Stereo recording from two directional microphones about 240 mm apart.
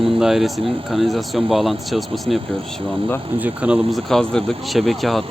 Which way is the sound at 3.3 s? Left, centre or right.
Centre.